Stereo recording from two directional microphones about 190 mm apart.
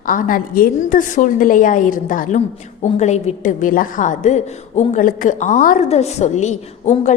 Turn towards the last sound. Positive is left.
turn(degrees=40)  # may be behind; listen again after turning